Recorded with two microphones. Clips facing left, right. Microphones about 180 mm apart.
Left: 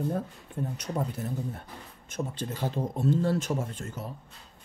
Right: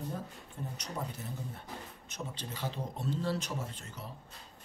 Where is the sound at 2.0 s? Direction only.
50° left (ahead or behind).